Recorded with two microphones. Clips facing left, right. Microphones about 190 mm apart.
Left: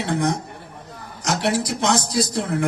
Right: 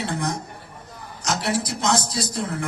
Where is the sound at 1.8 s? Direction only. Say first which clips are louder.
Left 3 dB; 60° left (ahead or behind).